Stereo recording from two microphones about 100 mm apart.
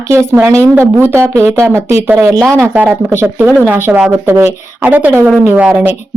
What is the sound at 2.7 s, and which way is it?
Speech, 15° right (ahead or behind).